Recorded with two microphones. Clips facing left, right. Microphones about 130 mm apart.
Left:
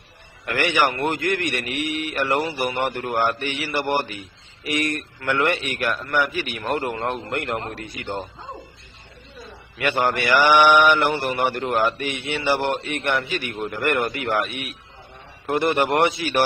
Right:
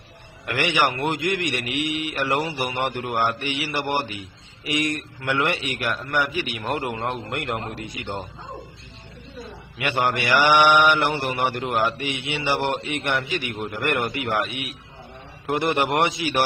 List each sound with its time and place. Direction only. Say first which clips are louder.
0.5 s mantra: left 1 dB; 15° right (ahead or behind)
9.7 s mantra: left 2 dB; 15° right (ahead or behind)